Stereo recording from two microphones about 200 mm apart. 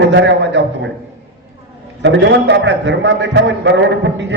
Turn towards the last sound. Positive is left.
turn(degrees=-65)  # may be behind; listen again after turning